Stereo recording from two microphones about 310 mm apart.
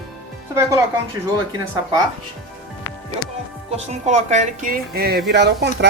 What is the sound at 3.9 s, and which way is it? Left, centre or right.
Speech, right.